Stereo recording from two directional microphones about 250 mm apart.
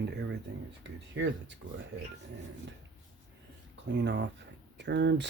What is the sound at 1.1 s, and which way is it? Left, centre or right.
Speech, right.